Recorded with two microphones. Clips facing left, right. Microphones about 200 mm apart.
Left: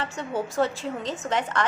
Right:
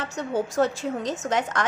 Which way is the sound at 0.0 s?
40° right (ahead or behind).